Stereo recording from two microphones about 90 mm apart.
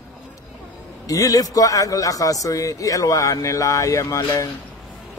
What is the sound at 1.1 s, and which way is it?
A man's voice, 40° left (ahead or behind).